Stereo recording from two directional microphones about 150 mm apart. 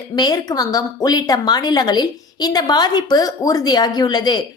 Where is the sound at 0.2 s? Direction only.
25° left (ahead or behind).